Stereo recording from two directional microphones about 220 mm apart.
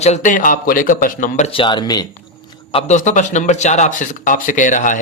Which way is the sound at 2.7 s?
30° left (ahead or behind).